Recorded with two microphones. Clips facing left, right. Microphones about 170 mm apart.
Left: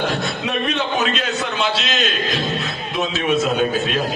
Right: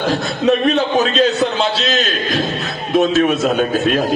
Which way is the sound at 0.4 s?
40° right (ahead or behind).